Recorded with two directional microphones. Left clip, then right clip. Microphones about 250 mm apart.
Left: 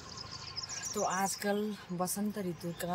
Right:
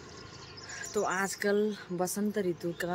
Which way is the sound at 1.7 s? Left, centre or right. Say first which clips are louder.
Right 3 dB; centre.